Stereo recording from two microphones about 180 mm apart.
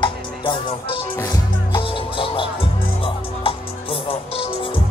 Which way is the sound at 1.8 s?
30° left (ahead or behind).